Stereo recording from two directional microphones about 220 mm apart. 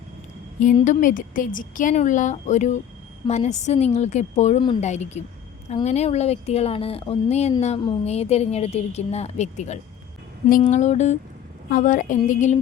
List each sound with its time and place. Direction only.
0.6 s a woman's voice: 35° left (ahead or behind)